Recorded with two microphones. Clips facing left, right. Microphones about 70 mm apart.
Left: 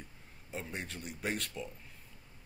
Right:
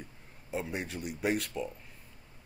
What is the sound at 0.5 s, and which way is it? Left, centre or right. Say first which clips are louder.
Speech: right 6 dB; centre.